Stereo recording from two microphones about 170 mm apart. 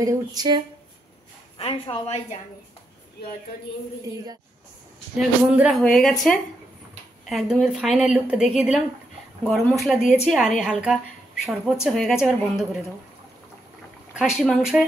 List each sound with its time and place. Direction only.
0.0 s speech: 20° right (ahead or behind)
1.6 s a woman's voice: 35° left (ahead or behind)
5.1 s speech: 5° right (ahead or behind)
14.1 s speech: centre (ahead or behind)